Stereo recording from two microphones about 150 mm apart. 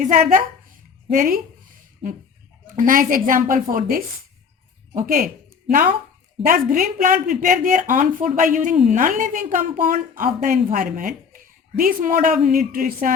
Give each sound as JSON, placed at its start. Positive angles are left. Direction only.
{"t": 0.0, "sound": "speech", "side_deg": -65}
{"t": 2.7, "sound": "speech", "side_deg": -65}
{"t": 6.4, "sound": "speech", "side_deg": -65}